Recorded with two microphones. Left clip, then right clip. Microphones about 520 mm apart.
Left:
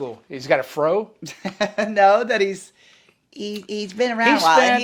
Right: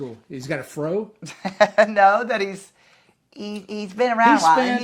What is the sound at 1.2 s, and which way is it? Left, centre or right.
Speech, right.